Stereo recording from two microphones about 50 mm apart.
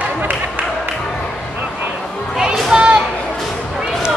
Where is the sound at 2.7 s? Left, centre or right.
Centre.